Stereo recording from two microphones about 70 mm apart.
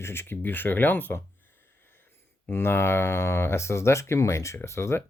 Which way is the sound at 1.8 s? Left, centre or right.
Left.